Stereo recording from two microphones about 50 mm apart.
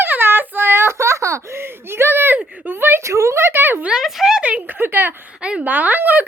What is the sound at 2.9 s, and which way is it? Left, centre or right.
Speech, right.